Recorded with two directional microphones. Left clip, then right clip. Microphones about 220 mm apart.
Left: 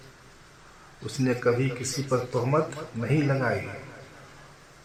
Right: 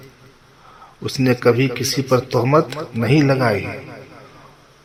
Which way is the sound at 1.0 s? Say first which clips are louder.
Right 9 dB; 35° right (ahead or behind).